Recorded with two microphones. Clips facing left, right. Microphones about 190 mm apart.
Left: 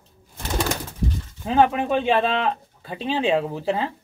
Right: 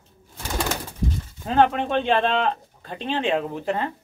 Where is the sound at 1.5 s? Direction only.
5° left (ahead or behind).